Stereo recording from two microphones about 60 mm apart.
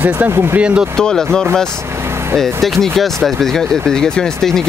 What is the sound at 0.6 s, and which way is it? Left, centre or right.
Speech, centre.